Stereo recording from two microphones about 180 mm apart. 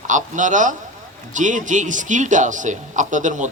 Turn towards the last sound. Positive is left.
turn(degrees=-45)  # may be behind; listen again after turning